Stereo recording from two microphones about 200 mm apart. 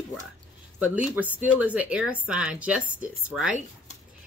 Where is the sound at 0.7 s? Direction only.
10° right (ahead or behind).